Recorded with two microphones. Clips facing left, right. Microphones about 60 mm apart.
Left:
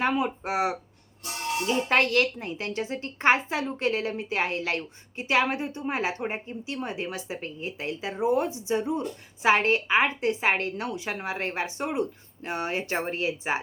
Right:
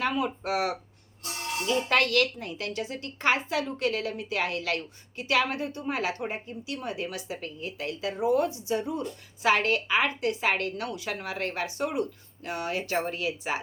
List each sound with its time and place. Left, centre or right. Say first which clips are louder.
0.0 s a woman's voice: left 2 dB; left